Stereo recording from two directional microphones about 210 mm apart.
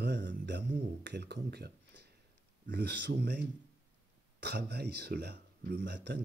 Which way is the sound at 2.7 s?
50° right (ahead or behind).